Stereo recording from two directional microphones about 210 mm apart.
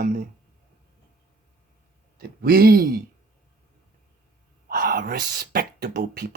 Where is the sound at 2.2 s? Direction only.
45° right (ahead or behind).